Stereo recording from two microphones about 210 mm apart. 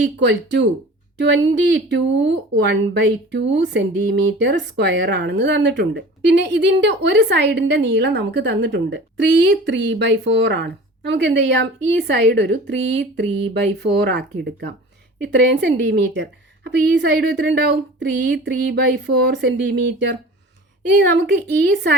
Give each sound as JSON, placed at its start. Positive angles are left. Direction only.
{"t": 0.0, "sound": "a woman's voice", "side_deg": -55}